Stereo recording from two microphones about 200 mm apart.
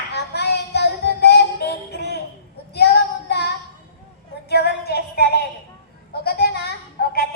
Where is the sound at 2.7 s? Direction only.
55° left (ahead or behind).